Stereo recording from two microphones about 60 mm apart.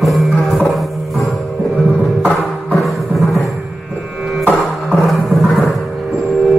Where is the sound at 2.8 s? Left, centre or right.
Centre.